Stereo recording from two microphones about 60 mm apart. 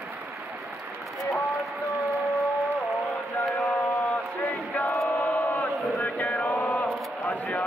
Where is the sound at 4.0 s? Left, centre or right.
Centre.